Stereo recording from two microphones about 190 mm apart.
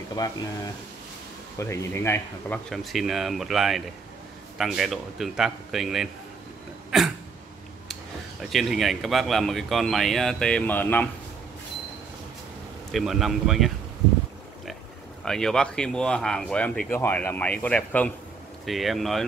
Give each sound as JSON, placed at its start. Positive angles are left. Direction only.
{"t": 0.2, "sound": "speech", "side_deg": 20}
{"t": 1.6, "sound": "speech", "side_deg": 15}
{"t": 12.9, "sound": "speech", "side_deg": 0}
{"t": 15.2, "sound": "speech", "side_deg": 5}